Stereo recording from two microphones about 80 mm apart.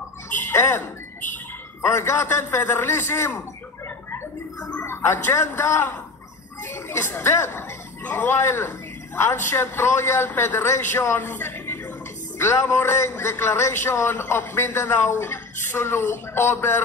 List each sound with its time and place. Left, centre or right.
0.3 s a sound: left
2.0 s a man's voice: left
4.8 s a man's voice: left